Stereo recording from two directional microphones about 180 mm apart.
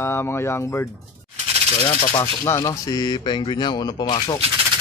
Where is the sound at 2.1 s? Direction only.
15° left (ahead or behind).